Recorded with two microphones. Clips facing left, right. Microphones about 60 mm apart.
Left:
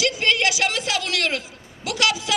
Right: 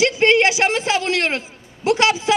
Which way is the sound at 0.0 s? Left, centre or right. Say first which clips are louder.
Right 6 dB; right.